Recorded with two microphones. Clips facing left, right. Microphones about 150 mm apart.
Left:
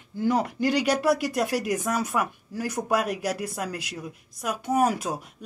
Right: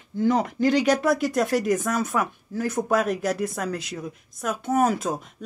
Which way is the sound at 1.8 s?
10° left (ahead or behind).